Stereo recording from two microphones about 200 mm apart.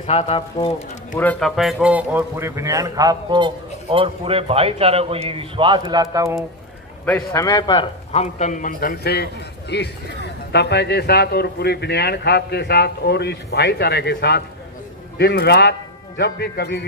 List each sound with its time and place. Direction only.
0.0 s speech: 30° left (ahead or behind)
1.1 s a man's voice: 5° left (ahead or behind); by 6.4 s 15° right (ahead or behind)
7.1 s a man's voice: 5° left (ahead or behind)
7.4 s speech: 20° left (ahead or behind); by 16.8 s 55° left (ahead or behind)